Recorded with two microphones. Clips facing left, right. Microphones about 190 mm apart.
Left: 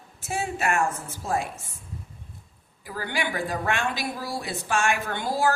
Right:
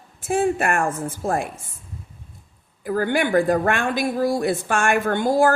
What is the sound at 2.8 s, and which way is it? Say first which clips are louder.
A woman's voice: right 10 dB; 50° right (ahead or behind).